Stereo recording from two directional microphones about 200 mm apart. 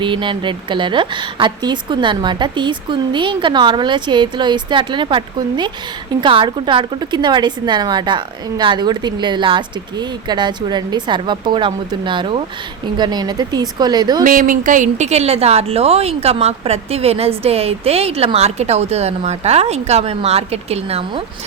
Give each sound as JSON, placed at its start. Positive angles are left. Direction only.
{"t": 0.0, "sound": "a woman's voice", "side_deg": -25}
{"t": 14.3, "sound": "speech", "side_deg": -40}